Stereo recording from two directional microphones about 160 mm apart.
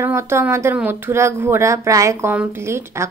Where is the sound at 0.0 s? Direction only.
15° right (ahead or behind).